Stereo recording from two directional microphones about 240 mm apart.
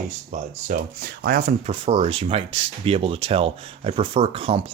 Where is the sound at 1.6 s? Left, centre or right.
Right.